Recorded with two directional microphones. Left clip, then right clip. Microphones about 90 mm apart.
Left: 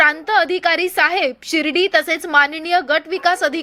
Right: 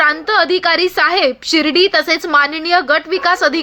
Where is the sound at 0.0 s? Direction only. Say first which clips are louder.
Right 2 dB; 25° left (ahead or behind).